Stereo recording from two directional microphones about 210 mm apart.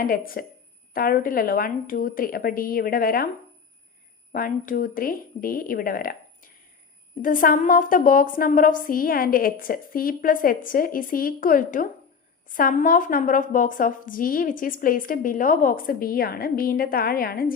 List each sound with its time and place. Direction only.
0.0 s a woman's voice: 45° left (ahead or behind)
4.3 s a woman's voice: 40° left (ahead or behind)